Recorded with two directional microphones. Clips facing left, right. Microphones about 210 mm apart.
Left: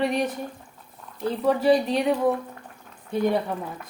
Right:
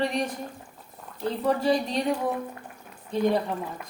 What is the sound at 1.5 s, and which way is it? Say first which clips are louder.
Speech: left 4 dB; 5° left (ahead or behind).